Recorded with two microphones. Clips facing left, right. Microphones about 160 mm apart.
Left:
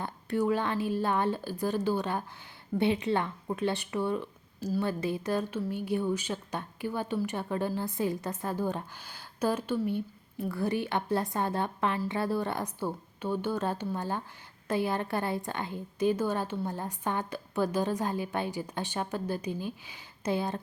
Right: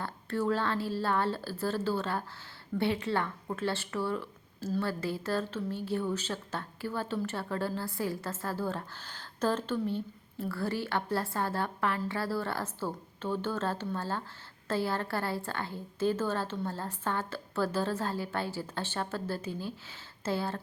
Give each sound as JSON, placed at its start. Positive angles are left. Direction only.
{"t": 0.0, "sound": "a woman's voice", "side_deg": 15}